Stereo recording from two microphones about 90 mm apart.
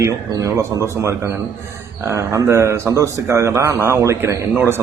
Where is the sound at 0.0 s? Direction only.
35° right (ahead or behind).